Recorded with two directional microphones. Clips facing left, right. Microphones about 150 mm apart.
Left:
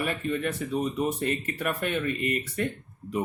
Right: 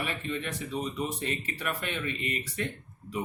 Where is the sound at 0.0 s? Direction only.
50° left (ahead or behind).